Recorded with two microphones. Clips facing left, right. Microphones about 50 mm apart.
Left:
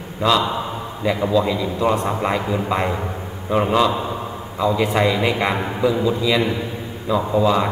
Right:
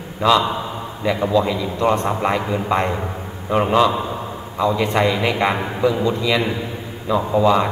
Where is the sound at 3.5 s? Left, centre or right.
Centre.